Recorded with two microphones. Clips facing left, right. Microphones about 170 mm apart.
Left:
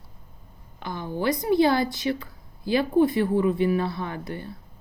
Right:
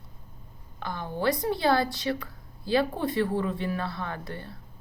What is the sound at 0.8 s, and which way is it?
Speech, 15° left (ahead or behind).